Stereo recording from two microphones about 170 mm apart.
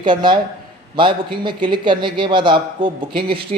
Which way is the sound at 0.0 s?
25° right (ahead or behind).